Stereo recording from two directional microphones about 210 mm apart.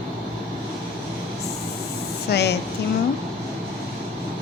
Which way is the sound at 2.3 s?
50° left (ahead or behind).